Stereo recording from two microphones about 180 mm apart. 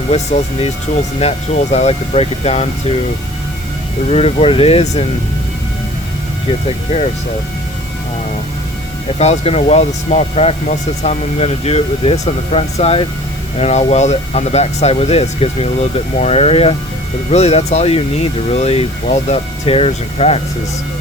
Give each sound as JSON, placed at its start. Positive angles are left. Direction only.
{"t": 0.1, "sound": "speech", "side_deg": 35}
{"t": 4.1, "sound": "speech", "side_deg": 35}
{"t": 9.1, "sound": "speech", "side_deg": 35}